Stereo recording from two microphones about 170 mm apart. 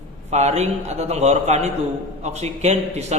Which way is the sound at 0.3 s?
40° right (ahead or behind).